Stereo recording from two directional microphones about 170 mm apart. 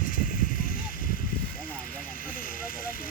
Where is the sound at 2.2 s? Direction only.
55° left (ahead or behind).